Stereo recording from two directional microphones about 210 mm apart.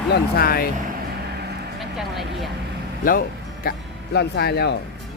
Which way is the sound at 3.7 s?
45° left (ahead or behind).